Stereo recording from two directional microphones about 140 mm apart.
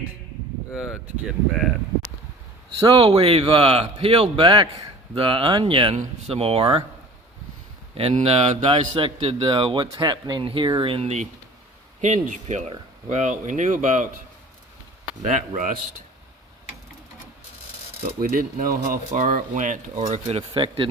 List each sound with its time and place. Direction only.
0.7 s speech: 5° right (ahead or behind)
2.8 s a man's voice: 40° right (ahead or behind)
7.9 s a man's voice: 45° right (ahead or behind)
12.0 s speech: 60° right (ahead or behind)
15.3 s a man's voice: 65° right (ahead or behind)
18.2 s speech: 90° right; by 20.4 s 50° right (ahead or behind)
20.5 s a man's voice: 35° right (ahead or behind)